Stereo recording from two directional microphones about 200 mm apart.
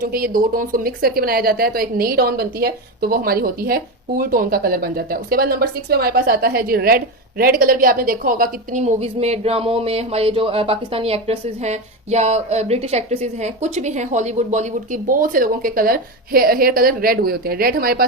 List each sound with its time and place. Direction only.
0.0 s a woman's voice: 45° right (ahead or behind)